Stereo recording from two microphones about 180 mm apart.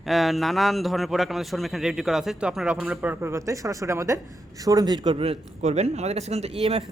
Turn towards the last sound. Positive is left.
turn(degrees=-35)  # may be behind; listen again after turning